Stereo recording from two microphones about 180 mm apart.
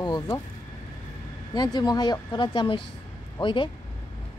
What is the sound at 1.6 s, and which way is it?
Speech, 20° left (ahead or behind).